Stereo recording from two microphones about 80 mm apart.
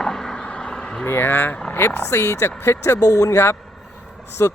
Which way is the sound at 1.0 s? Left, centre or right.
Left.